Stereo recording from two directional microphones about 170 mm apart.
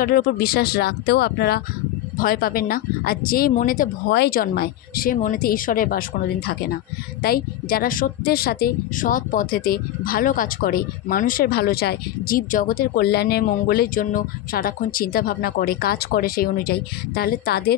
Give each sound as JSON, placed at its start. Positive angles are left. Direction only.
{"t": 0.0, "sound": "speech", "side_deg": 60}
{"t": 2.1, "sound": "speech", "side_deg": 60}
{"t": 4.1, "sound": "speech", "side_deg": 65}